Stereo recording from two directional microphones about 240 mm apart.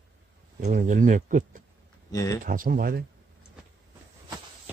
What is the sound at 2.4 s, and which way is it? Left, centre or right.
Speech, right.